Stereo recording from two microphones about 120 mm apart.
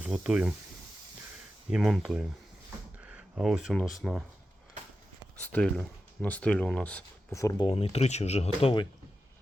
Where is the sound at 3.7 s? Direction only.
Centre (ahead or behind).